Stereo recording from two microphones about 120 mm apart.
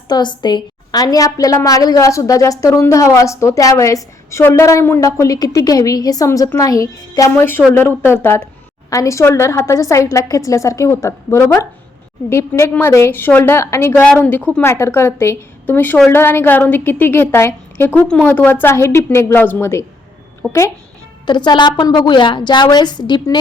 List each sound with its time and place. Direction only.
0.1 s a woman's voice: 40° left (ahead or behind); by 13.9 s 20° left (ahead or behind)
13.9 s a woman's voice: 10° left (ahead or behind)
21.2 s a woman's voice: 40° left (ahead or behind)